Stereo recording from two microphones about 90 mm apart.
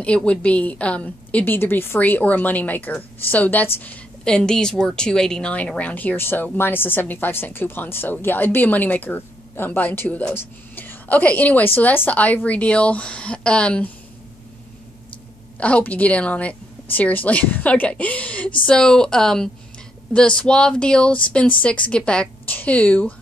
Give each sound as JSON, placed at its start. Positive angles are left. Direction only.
{"t": 0.0, "sound": "a woman's voice", "side_deg": 15}
{"t": 15.6, "sound": "a woman's voice", "side_deg": 15}